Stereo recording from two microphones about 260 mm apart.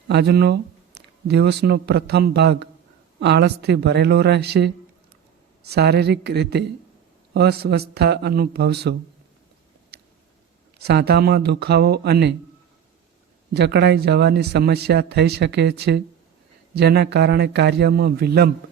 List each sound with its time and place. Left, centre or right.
0.1 s speech: right
9.9 s a sound: right
10.8 s speech: right
13.5 s speech: right